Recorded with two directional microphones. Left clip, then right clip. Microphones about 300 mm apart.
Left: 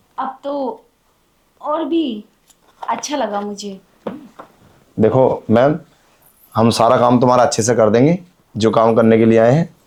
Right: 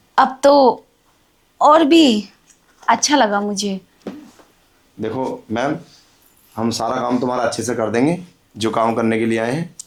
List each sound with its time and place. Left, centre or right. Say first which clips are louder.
0.2 s a sound: right 11 dB; right
1.5 s speech: right 8 dB; right
2.8 s a woman's voice: right 6 dB; right
4.9 s speech: left 10 dB; left